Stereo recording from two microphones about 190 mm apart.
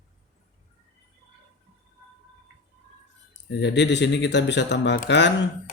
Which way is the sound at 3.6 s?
65° left (ahead or behind).